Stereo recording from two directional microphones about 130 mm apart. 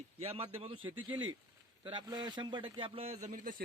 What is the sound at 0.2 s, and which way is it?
A man's voice, 50° right (ahead or behind).